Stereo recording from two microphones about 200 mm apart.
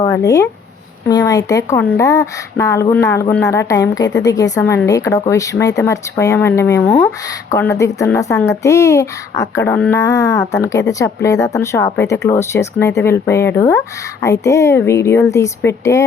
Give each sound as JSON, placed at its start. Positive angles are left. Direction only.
{"t": 0.0, "sound": "speech", "side_deg": 15}